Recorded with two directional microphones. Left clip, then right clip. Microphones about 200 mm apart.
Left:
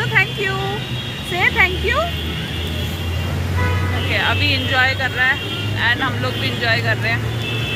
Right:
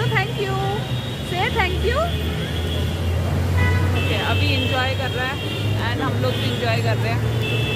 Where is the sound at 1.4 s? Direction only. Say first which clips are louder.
Left 6 dB; 30° left (ahead or behind).